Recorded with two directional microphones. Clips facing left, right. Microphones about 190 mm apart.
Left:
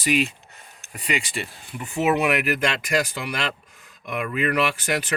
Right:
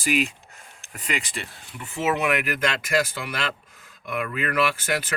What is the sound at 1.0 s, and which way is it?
Speech, 5° left (ahead or behind).